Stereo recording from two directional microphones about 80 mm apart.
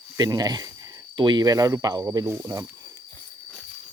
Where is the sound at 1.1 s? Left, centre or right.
Right.